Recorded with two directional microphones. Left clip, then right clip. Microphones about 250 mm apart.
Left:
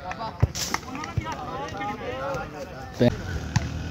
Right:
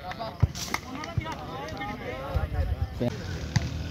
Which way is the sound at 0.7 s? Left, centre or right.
Centre.